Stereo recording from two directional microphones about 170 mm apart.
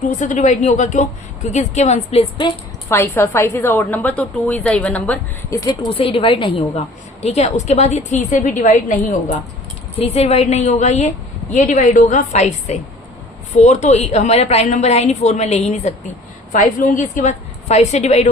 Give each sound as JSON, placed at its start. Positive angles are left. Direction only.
{"t": 0.0, "sound": "a woman's voice", "side_deg": 45}
{"t": 2.9, "sound": "a woman's voice", "side_deg": 15}
{"t": 5.6, "sound": "a woman's voice", "side_deg": 30}